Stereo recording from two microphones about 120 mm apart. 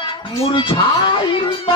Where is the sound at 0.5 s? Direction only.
45° left (ahead or behind).